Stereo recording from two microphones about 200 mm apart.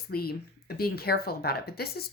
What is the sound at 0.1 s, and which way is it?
Speech, 50° left (ahead or behind).